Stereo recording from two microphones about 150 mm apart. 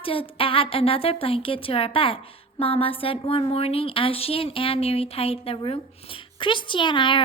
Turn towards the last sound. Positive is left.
turn(degrees=35)  # may be behind; listen again after turning